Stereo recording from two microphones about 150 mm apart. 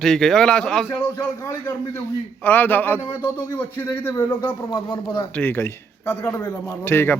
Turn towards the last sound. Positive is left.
turn(degrees=15)  # may be behind; listen again after turning